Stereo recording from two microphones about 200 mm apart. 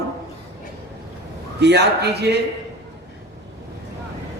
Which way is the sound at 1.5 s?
55° right (ahead or behind).